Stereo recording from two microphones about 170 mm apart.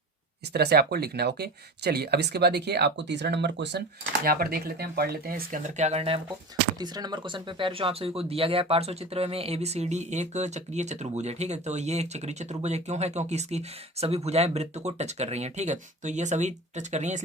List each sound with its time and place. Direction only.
0.5 s speech: 70° right (ahead or behind); by 6.1 s 40° right (ahead or behind)
6.7 s speech: 25° right (ahead or behind); by 17.2 s 45° right (ahead or behind)